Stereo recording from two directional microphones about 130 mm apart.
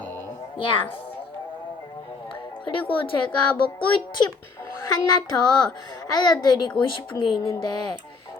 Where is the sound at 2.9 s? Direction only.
40° left (ahead or behind).